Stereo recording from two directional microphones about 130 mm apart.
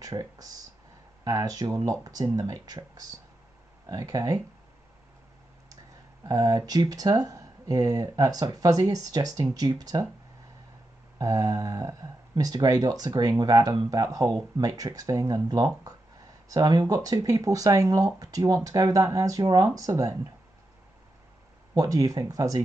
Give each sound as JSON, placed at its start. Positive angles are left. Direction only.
{"t": 0.0, "sound": "speech", "side_deg": -30}
{"t": 6.2, "sound": "speech", "side_deg": -30}
{"t": 11.1, "sound": "speech", "side_deg": -25}
{"t": 21.7, "sound": "speech", "side_deg": -25}